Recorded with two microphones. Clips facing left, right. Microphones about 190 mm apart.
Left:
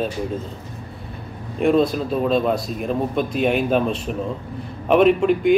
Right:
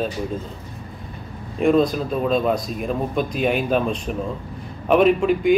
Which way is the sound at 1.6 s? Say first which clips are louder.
Even; 5° left (ahead or behind).